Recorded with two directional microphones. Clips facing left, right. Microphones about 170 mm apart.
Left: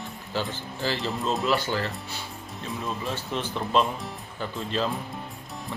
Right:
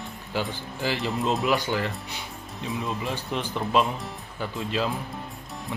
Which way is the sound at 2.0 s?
15° right (ahead or behind).